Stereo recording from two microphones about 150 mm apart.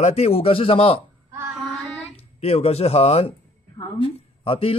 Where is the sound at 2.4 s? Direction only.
45° left (ahead or behind).